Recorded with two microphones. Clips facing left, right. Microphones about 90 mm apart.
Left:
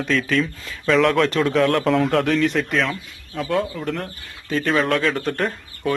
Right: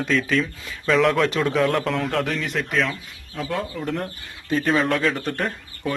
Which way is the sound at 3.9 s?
15° right (ahead or behind).